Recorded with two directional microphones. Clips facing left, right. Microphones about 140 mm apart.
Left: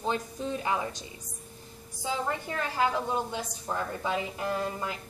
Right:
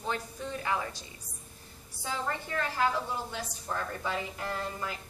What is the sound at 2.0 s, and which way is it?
A woman's voice, 15° left (ahead or behind).